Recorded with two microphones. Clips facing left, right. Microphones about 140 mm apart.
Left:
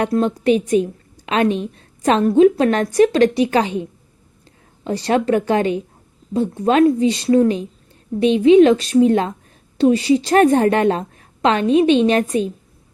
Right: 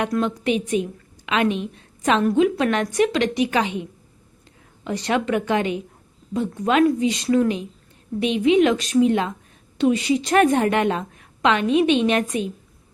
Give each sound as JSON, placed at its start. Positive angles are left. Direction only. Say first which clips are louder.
{"t": 0.0, "sound": "a woman's voice", "louder": "left 5 dB", "side_deg": 35}